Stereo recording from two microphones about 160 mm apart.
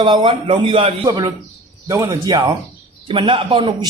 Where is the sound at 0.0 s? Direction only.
30° right (ahead or behind).